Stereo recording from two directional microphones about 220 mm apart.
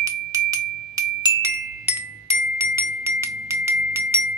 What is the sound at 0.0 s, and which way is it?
Glockenspiel, 15° right (ahead or behind).